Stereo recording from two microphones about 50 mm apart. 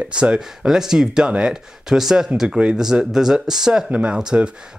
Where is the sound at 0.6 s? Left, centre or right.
Centre.